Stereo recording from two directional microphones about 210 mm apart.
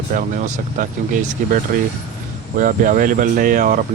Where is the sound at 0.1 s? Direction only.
40° right (ahead or behind).